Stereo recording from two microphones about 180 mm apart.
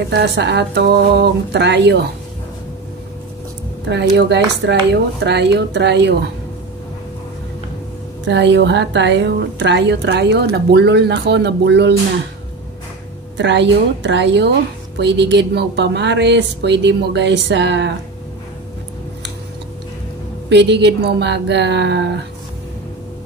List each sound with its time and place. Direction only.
0.1 s a woman's voice: 70° right (ahead or behind)
3.9 s a woman's voice: 70° right (ahead or behind)
8.3 s a woman's voice: 75° right (ahead or behind)
13.4 s a woman's voice: 80° right
20.4 s a woman's voice: 70° right (ahead or behind)